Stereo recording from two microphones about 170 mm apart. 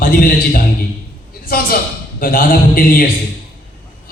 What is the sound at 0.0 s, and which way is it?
A man's voice, 60° left (ahead or behind).